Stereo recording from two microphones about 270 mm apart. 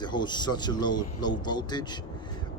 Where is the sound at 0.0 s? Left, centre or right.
Centre.